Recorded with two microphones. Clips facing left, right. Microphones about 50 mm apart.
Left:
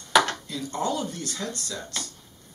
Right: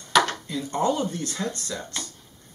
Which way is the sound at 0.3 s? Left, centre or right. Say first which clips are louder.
Right 2 dB; right.